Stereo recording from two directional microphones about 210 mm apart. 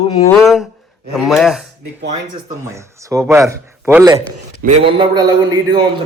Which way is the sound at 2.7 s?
15° right (ahead or behind).